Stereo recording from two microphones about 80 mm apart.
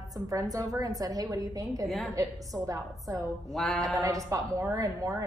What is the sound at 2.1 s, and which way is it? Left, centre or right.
A woman's voice, right.